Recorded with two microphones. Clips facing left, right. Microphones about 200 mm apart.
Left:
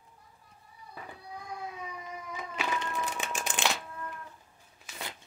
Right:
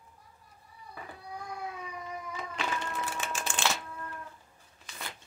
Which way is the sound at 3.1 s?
15° left (ahead or behind).